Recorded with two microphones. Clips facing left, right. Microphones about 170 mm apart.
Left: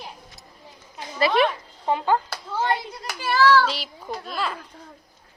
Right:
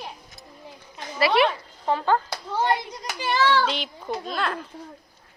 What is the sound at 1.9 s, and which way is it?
Speech, 15° left (ahead or behind).